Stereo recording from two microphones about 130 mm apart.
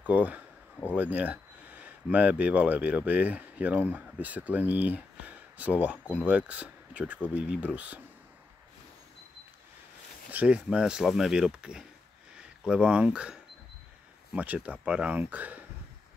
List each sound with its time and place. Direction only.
0.0 s speech: 10° right (ahead or behind)
10.3 s speech: 10° right (ahead or behind)